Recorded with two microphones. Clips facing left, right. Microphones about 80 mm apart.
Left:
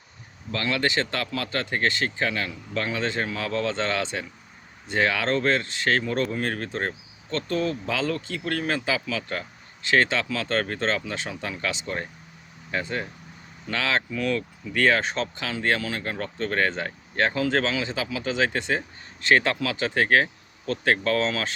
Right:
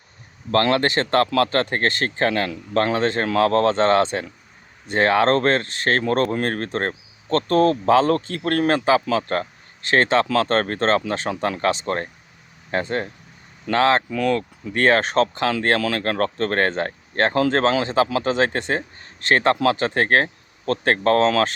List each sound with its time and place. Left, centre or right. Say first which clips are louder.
0.5 s speech: right 7 dB; right
15.0 s speech: right 10 dB; right